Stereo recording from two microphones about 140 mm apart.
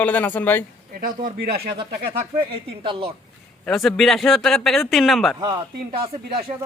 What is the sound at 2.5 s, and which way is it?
Speech, 40° right (ahead or behind).